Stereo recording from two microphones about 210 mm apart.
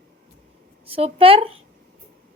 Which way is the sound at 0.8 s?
25° right (ahead or behind).